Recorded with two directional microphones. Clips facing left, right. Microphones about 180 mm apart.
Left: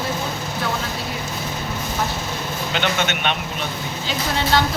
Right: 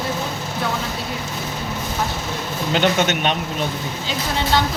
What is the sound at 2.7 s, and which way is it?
Speech, 40° right (ahead or behind).